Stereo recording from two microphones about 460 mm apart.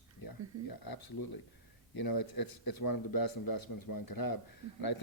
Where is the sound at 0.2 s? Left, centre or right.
Left.